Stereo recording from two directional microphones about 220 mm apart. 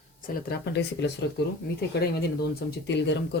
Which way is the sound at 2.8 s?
50° left (ahead or behind).